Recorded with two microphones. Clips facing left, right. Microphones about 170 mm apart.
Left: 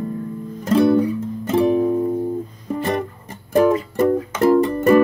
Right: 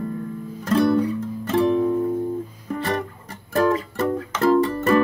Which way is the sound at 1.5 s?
15° left (ahead or behind).